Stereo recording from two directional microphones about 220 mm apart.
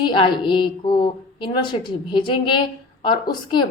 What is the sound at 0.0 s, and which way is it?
A woman's voice, 20° left (ahead or behind).